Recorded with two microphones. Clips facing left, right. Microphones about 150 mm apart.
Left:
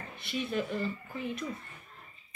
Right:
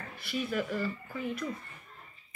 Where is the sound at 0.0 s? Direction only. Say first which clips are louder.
Right 1 dB; 25° left (ahead or behind).